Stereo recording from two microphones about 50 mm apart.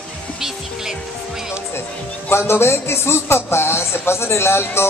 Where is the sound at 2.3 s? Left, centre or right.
Left.